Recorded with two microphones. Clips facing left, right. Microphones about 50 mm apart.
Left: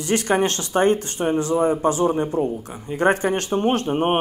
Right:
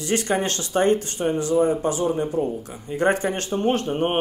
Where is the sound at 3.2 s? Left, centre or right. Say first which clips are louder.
Left 3 dB; left.